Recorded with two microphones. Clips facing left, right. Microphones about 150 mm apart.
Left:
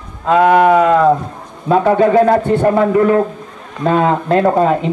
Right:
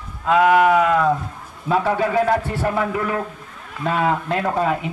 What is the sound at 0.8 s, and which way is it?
A man's voice, 35° left (ahead or behind).